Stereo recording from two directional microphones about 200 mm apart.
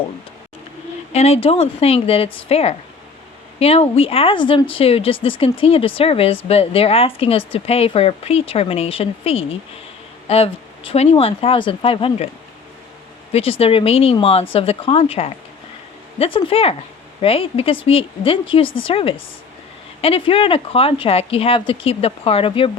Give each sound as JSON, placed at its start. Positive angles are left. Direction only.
{"t": 1.1, "sound": "speech", "side_deg": 30}
{"t": 13.3, "sound": "speech", "side_deg": 30}